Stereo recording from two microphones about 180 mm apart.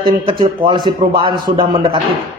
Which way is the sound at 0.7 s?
25° right (ahead or behind).